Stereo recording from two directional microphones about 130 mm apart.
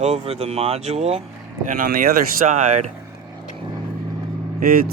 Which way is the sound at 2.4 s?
65° right (ahead or behind).